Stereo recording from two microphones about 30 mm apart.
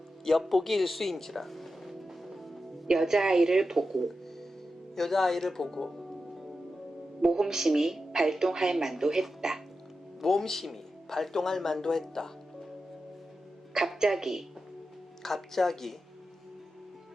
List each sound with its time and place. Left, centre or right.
0.3 s speech: centre
2.9 s a woman's voice: centre
3.8 s speech: centre
7.2 s a woman's voice: centre
10.2 s speech: centre
14.0 s a woman's voice: centre
15.2 s speech: centre